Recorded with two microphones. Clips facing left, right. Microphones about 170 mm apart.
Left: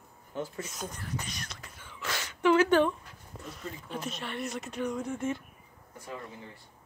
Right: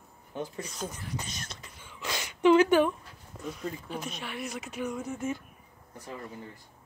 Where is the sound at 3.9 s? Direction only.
Centre (ahead or behind).